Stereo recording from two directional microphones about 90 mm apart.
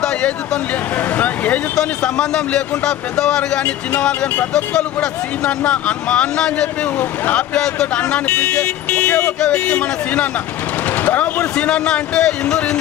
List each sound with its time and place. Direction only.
0.0 s vehicle: 5° left (ahead or behind)
0.9 s speech: 20° left (ahead or behind)